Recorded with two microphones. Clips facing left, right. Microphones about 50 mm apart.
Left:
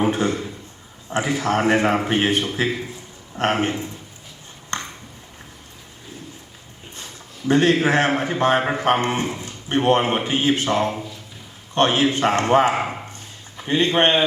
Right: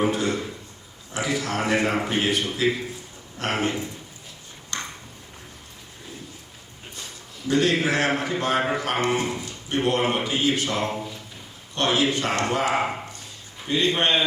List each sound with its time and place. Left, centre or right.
0.0 s a man's voice: left
4.7 s ping: left
7.4 s a man's voice: left